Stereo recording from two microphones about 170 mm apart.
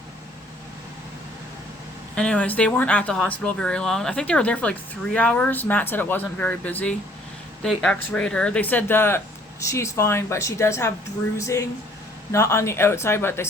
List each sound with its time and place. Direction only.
2.1 s speech: 5° left (ahead or behind)